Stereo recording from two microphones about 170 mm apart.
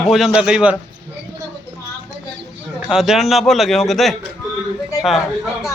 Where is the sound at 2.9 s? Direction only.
Centre (ahead or behind).